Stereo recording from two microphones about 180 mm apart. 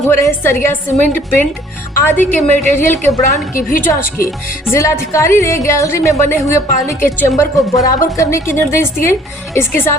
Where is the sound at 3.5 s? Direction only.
50° left (ahead or behind).